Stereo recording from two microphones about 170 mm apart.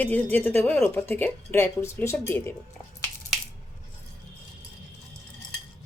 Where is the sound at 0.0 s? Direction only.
10° left (ahead or behind).